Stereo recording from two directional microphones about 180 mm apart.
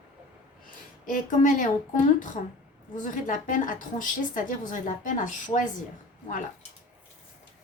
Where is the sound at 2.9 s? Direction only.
45° left (ahead or behind).